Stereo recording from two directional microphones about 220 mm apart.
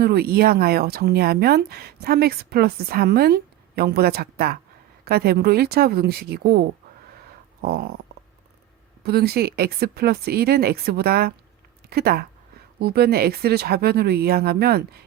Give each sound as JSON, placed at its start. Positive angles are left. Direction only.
{"t": 0.0, "sound": "speech", "side_deg": -45}
{"t": 7.6, "sound": "a sound", "side_deg": -45}
{"t": 9.0, "sound": "speech", "side_deg": -45}